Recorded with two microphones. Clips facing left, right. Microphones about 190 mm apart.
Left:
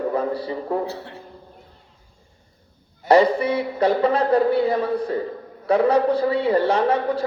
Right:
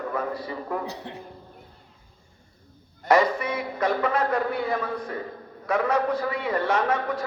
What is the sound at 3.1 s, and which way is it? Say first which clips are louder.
A man's voice: left 5 dB; 30° left (ahead or behind).